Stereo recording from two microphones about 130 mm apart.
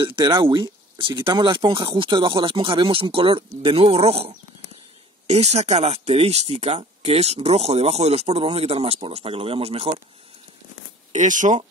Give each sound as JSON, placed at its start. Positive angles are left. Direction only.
{"t": 0.0, "sound": "speech", "side_deg": -40}
{"t": 11.1, "sound": "speech", "side_deg": -75}